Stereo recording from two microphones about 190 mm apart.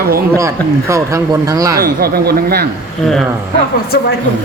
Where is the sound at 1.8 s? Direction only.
55° right (ahead or behind).